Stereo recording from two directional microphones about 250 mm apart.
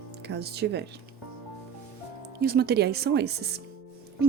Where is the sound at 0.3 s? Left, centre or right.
Right.